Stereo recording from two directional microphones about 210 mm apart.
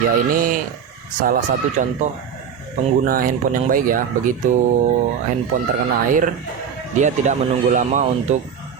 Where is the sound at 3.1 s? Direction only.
40° right (ahead or behind).